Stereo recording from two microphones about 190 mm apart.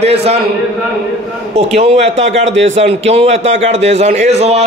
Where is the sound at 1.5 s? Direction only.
35° right (ahead or behind).